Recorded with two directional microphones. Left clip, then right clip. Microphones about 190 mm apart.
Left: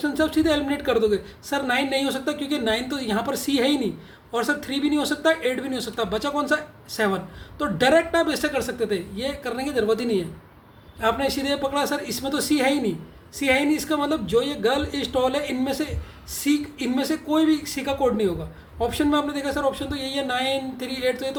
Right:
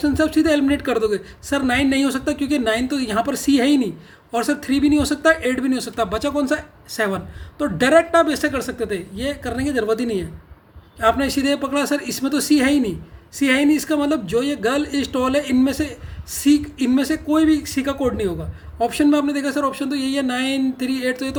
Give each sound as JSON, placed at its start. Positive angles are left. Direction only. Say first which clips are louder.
{"t": 0.0, "sound": "speech", "louder": "right 4 dB", "side_deg": -45}